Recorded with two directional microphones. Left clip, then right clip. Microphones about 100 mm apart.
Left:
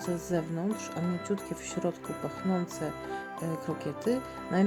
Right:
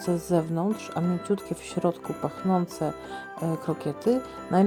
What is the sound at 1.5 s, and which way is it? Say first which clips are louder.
Speech: right 6 dB; 40° right (ahead or behind).